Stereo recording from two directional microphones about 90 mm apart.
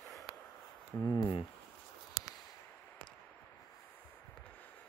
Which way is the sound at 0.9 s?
35° left (ahead or behind).